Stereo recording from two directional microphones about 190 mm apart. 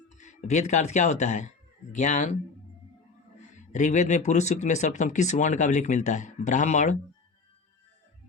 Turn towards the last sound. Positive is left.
turn(degrees=40)  # may be behind; listen again after turning